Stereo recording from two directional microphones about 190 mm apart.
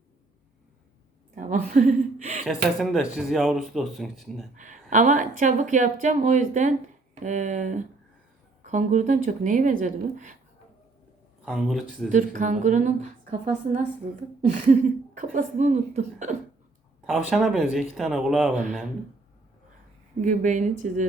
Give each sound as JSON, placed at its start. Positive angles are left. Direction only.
{"t": 1.4, "sound": "a woman's voice", "side_deg": -40}
{"t": 2.5, "sound": "speech", "side_deg": 0}
{"t": 4.5, "sound": "speech", "side_deg": -40}
{"t": 11.4, "sound": "speech", "side_deg": 0}
{"t": 12.0, "sound": "speech", "side_deg": -40}
{"t": 17.2, "sound": "speech", "side_deg": 0}
{"t": 20.2, "sound": "speech", "side_deg": -40}